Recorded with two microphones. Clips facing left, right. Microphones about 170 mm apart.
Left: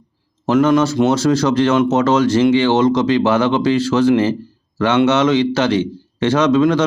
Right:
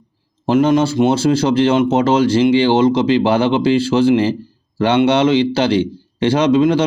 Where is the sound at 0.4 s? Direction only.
30° right (ahead or behind).